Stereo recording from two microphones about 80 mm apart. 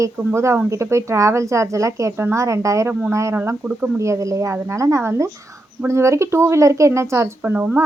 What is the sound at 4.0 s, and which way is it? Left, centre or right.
Speech, right.